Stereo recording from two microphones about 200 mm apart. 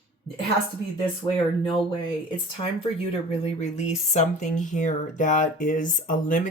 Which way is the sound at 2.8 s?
30° left (ahead or behind).